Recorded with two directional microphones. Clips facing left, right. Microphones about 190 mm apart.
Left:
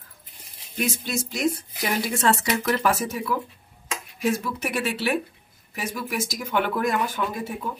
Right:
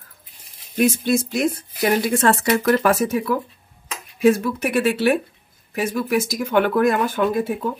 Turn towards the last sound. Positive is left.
turn(degrees=-60)  # may be behind; listen again after turning